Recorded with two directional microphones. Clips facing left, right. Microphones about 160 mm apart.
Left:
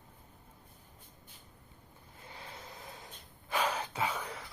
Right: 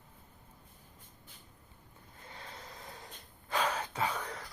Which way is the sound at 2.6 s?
25° left (ahead or behind).